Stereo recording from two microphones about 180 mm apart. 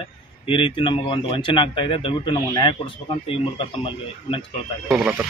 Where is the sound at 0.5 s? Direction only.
30° left (ahead or behind).